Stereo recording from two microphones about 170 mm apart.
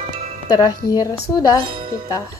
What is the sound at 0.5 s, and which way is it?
Speech, 25° left (ahead or behind).